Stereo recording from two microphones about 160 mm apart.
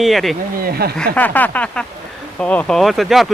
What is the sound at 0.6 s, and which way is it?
Speech, 75° right (ahead or behind).